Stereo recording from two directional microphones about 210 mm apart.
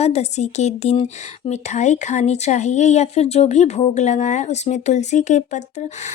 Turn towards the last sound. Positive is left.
turn(degrees=35)  # may be behind; listen again after turning